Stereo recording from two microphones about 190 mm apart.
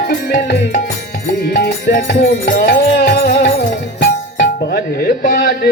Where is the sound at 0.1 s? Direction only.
55° left (ahead or behind).